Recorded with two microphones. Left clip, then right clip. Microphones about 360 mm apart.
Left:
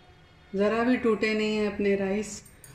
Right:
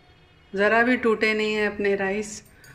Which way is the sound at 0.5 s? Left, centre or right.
Right.